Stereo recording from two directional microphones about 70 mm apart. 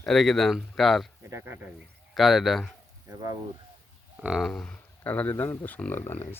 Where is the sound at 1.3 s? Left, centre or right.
Right.